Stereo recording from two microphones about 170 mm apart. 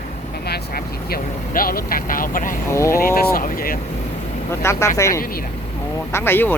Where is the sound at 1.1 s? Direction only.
60° left (ahead or behind).